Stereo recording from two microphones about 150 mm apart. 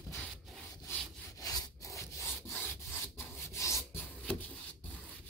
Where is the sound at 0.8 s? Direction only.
25° left (ahead or behind).